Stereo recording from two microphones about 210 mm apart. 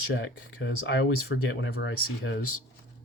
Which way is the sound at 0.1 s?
60° left (ahead or behind).